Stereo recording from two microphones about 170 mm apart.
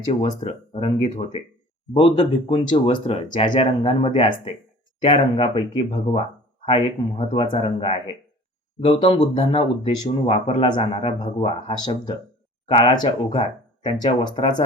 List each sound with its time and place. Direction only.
0.1 s speech: 35° left (ahead or behind)